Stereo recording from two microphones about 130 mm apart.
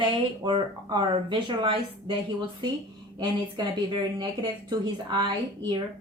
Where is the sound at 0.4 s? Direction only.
40° right (ahead or behind).